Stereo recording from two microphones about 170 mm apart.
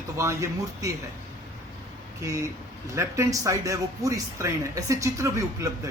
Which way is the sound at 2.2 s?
20° right (ahead or behind).